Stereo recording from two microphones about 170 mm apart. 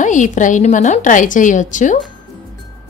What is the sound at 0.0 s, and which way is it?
A woman's voice, 45° left (ahead or behind).